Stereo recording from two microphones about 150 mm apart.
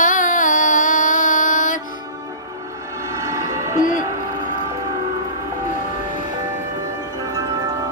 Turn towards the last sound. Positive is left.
turn(degrees=-25)  # may be behind; listen again after turning